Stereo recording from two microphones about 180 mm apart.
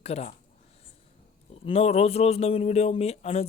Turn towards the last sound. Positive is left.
turn(degrees=35)  # may be behind; listen again after turning